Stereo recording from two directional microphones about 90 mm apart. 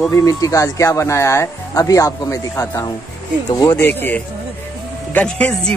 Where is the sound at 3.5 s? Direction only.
50° left (ahead or behind).